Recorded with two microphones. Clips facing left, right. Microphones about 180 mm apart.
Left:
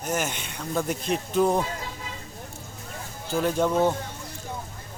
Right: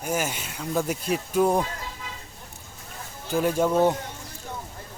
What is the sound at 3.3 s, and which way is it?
Speech, 10° right (ahead or behind).